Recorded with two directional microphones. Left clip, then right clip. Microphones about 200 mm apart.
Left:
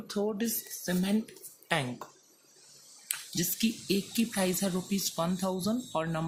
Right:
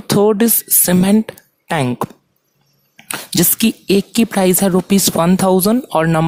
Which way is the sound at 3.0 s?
50° right (ahead or behind).